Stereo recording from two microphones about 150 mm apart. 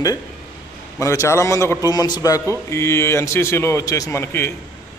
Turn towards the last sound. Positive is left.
turn(degrees=20)  # may be behind; listen again after turning